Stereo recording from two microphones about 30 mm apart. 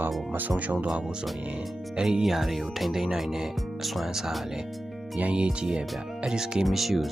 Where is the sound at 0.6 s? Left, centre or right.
Right.